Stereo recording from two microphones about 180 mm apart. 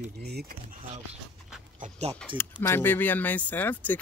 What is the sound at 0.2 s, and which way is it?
Speech, 60° right (ahead or behind).